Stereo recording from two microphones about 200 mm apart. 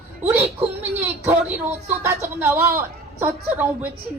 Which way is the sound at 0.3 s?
10° right (ahead or behind).